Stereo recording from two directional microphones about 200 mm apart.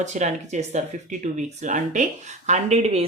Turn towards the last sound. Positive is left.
turn(degrees=-30)  # may be behind; listen again after turning